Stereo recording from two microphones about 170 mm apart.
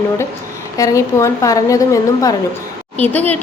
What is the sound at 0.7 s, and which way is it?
Speech, 20° left (ahead or behind).